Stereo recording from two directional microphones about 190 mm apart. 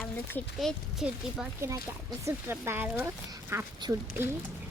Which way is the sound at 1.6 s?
15° right (ahead or behind).